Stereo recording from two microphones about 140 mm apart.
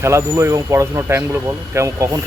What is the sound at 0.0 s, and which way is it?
Speech, 20° right (ahead or behind).